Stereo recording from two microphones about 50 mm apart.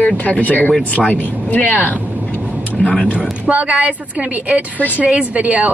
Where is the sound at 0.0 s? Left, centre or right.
Left.